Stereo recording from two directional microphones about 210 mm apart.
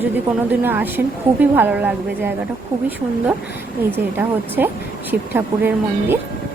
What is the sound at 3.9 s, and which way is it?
A woman's voice, 10° right (ahead or behind).